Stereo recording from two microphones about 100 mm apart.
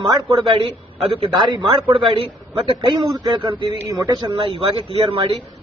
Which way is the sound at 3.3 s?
50° right (ahead or behind).